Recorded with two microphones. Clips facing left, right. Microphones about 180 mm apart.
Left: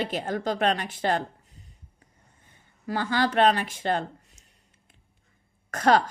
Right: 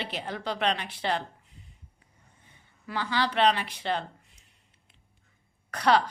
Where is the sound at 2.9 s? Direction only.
45° left (ahead or behind).